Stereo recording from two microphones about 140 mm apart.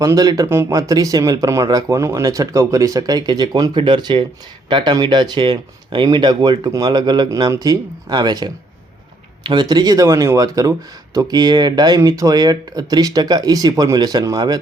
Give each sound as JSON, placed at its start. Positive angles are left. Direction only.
{"t": 0.0, "sound": "speech", "side_deg": -25}